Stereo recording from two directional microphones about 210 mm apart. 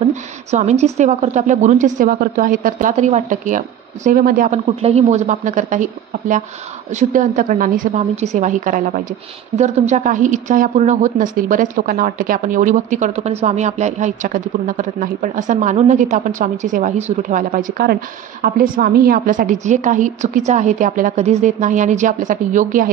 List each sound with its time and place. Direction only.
0.0 s a woman's voice: 35° right (ahead or behind)
4.6 s a woman's voice: 30° right (ahead or behind)